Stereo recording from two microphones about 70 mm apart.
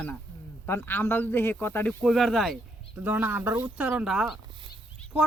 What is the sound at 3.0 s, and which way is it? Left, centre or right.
Speech, right.